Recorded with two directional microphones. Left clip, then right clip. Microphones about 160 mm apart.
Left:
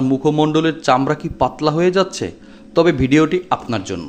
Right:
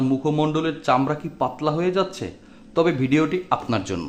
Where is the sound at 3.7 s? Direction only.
10° left (ahead or behind).